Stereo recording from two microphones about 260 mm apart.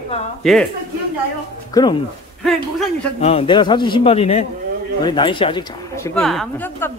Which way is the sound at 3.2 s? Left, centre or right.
Left.